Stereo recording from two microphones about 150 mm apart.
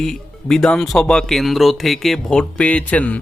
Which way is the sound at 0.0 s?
5° left (ahead or behind).